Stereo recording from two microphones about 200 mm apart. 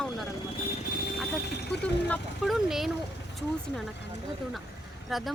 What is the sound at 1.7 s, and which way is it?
Speech, centre (ahead or behind).